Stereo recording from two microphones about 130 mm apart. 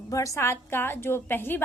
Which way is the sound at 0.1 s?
25° left (ahead or behind).